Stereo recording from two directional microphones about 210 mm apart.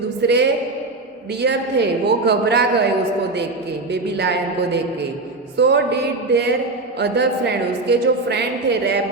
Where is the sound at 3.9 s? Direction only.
55° right (ahead or behind).